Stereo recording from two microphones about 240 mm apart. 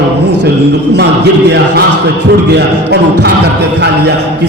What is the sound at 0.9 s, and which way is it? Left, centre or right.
Speech, right.